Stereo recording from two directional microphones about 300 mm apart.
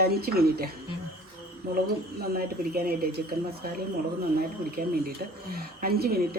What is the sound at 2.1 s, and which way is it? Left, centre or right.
Speech, right.